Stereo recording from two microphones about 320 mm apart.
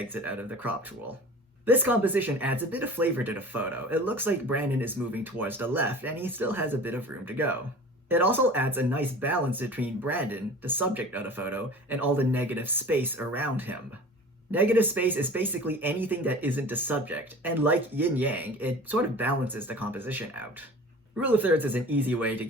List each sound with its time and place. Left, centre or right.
0.0 s speech: centre